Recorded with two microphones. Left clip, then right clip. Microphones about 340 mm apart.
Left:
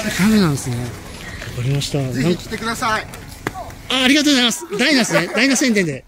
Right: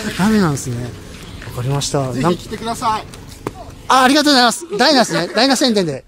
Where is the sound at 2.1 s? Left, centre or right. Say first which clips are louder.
Right 3 dB; centre.